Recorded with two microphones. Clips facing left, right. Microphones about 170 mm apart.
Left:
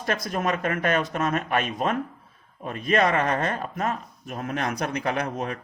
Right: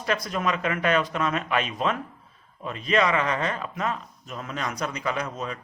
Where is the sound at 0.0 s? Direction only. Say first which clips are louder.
Even; 50° left (ahead or behind).